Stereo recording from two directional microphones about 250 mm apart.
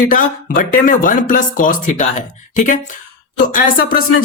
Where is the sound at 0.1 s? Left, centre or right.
Left.